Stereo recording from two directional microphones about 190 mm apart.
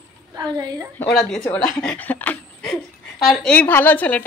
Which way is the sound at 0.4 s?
20° right (ahead or behind).